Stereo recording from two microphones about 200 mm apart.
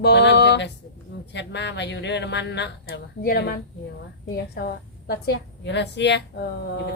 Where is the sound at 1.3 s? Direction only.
60° left (ahead or behind).